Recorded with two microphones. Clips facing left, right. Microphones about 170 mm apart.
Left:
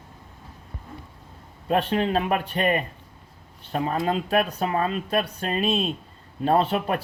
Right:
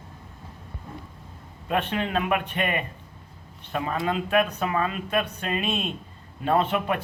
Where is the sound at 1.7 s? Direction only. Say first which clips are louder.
Left 4 dB; 35° left (ahead or behind).